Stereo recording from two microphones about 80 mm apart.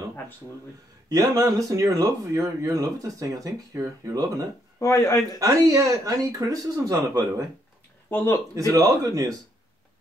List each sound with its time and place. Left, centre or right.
1.0 s speech: right
4.7 s speech: left
5.4 s speech: right
8.1 s speech: left
8.5 s speech: right